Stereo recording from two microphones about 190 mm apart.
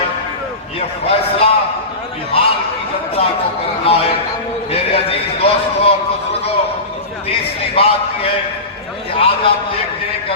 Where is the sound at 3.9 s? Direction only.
30° left (ahead or behind).